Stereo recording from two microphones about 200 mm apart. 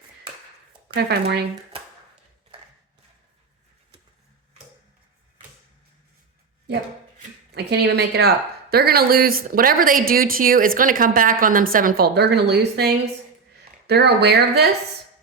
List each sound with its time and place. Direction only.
0.9 s speech: 55° right (ahead or behind)
7.5 s a woman's voice: 55° right (ahead or behind)